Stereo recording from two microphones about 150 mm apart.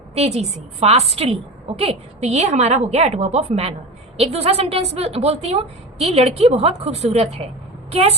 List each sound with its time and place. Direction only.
0.1 s a woman's voice: 45° right (ahead or behind)